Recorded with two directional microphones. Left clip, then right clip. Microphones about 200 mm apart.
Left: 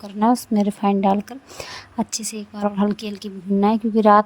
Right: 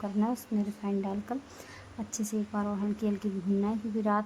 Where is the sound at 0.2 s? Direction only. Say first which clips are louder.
Left 16 dB; 50° left (ahead or behind).